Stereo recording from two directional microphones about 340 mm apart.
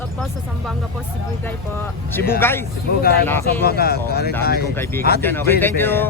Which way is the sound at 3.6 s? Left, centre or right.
Left.